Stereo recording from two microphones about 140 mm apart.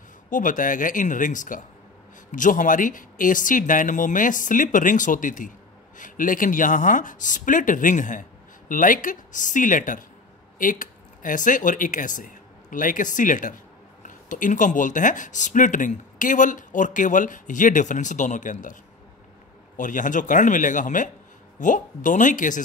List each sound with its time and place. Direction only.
0.3 s speech: 70° left (ahead or behind)
19.8 s speech: 65° left (ahead or behind)